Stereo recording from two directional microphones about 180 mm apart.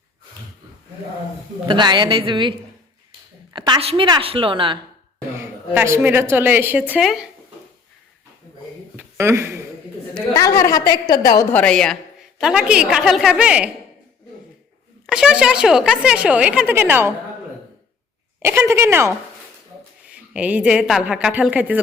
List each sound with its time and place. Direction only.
1.6 s a woman's voice: 25° right (ahead or behind)
5.4 s a woman's voice: 15° right (ahead or behind)
9.0 s a sound: 15° right (ahead or behind)
10.3 s a woman's voice: 15° left (ahead or behind)
11.5 s a woman's voice: 5° left (ahead or behind)
15.0 s a woman's voice: 5° right (ahead or behind)
18.4 s a woman's voice: 15° right (ahead or behind)